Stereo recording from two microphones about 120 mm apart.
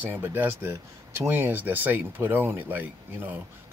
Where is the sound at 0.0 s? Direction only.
15° right (ahead or behind).